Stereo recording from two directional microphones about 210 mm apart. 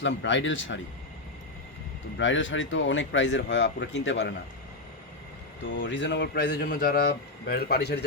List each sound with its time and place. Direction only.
0.0 s a man's voice: 60° left (ahead or behind)
2.1 s a man's voice: 65° left (ahead or behind)
5.6 s a man's voice: 60° left (ahead or behind)